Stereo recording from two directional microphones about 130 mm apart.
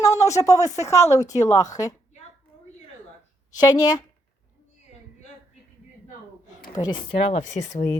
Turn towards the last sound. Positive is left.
turn(degrees=70)  # may be behind; listen again after turning